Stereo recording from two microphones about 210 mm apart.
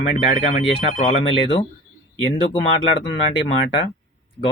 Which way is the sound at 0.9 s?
30° left (ahead or behind).